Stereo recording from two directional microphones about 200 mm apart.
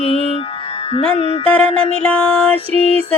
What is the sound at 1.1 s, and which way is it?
Mantra, 25° left (ahead or behind).